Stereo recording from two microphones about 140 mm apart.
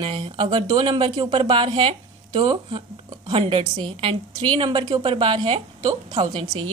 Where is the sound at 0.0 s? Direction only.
40° right (ahead or behind).